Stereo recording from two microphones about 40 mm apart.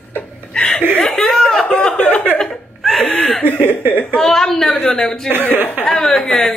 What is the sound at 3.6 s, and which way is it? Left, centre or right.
Speech, right.